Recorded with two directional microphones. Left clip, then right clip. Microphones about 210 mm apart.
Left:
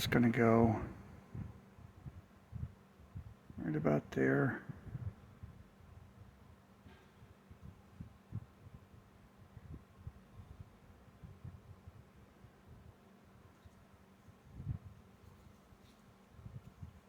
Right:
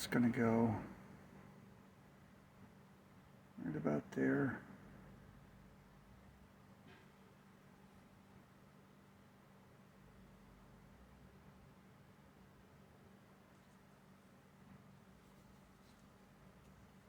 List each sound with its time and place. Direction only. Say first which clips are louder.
0.0 s speech: left 5 dB; 50° left (ahead or behind)
3.7 s speech: left 6 dB; 50° left (ahead or behind)